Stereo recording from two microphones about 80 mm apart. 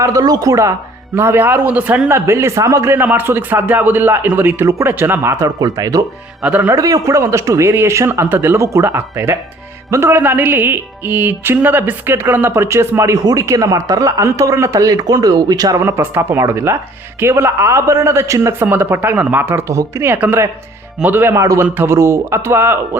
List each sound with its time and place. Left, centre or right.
0.0 s a man's voice: right
1.1 s speech: right
2.0 s speech: right
6.4 s a man's voice: centre
6.7 s a man's voice: right
15.8 s speech: right
18.6 s speech: right
20.1 s a man's voice: centre
21.4 s speech: right